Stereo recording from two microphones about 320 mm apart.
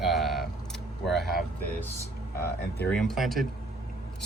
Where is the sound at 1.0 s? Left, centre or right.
Centre.